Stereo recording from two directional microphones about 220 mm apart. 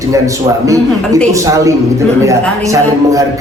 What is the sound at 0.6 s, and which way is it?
A man's voice, 15° right (ahead or behind).